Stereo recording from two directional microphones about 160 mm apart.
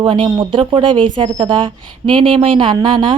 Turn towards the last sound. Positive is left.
turn(degrees=-30)  # may be behind; listen again after turning